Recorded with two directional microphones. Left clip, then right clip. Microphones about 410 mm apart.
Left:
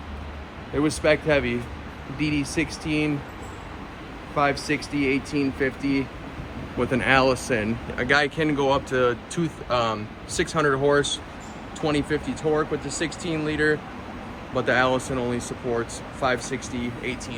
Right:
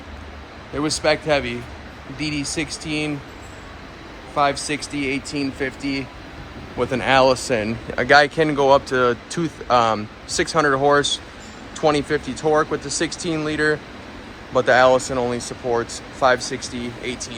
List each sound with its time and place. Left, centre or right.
0.8 s speech: centre
4.4 s speech: centre